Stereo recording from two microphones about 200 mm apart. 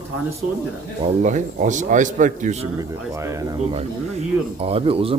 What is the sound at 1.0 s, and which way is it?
A man's voice, 35° right (ahead or behind).